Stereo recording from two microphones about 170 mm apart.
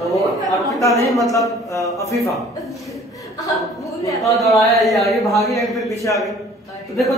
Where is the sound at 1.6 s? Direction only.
20° left (ahead or behind).